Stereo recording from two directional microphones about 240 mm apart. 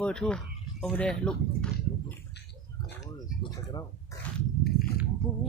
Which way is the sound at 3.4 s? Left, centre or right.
Centre.